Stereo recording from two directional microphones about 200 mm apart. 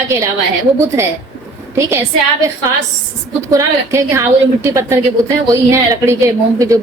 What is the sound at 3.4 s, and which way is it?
Speech, 15° right (ahead or behind).